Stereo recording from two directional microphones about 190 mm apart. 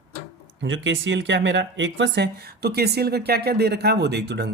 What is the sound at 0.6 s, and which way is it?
Speech, 75° right (ahead or behind).